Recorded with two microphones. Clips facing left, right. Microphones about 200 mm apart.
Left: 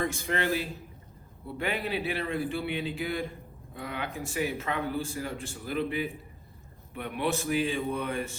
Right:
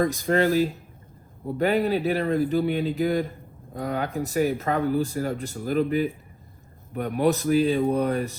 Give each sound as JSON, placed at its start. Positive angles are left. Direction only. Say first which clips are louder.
{"t": 0.0, "sound": "a man's voice", "louder": "right 8 dB", "side_deg": -40}